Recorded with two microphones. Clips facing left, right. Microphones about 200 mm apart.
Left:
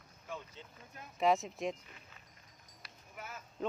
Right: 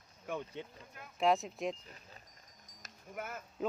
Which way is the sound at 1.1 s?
Centre (ahead or behind).